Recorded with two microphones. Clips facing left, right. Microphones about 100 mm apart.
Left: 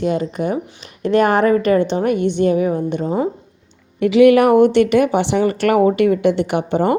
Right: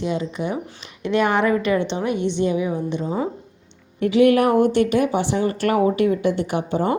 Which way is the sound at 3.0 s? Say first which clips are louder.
Left 6 dB; 35° left (ahead or behind).